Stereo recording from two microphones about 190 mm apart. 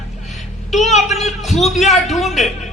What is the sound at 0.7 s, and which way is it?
A man's voice, centre (ahead or behind).